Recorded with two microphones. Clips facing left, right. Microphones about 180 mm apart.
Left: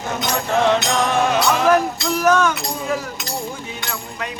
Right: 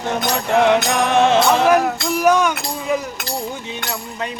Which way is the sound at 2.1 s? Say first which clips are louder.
Right 1 dB; 15° right (ahead or behind).